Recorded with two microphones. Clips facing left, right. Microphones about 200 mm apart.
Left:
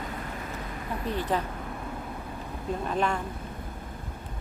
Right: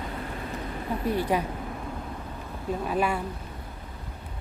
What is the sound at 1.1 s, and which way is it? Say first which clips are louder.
Speech: right 3 dB; 10° right (ahead or behind).